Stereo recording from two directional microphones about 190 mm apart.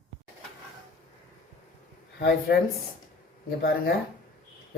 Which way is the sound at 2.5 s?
60° left (ahead or behind).